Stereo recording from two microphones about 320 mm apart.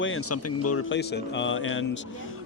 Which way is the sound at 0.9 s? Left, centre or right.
Left.